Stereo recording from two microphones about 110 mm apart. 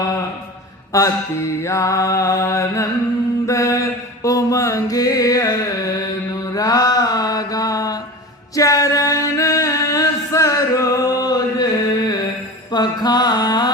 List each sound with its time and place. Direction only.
0.9 s mantra: 25° left (ahead or behind)
8.5 s a sound: 30° left (ahead or behind)
12.7 s mantra: 40° left (ahead or behind)